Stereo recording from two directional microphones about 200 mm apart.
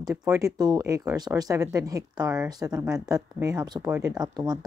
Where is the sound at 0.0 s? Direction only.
15° right (ahead or behind).